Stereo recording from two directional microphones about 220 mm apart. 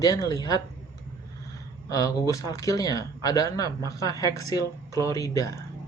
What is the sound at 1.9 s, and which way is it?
Speech, 15° left (ahead or behind).